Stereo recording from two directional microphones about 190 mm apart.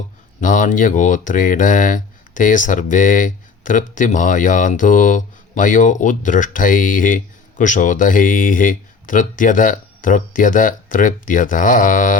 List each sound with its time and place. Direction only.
0.3 s speech: 45° left (ahead or behind)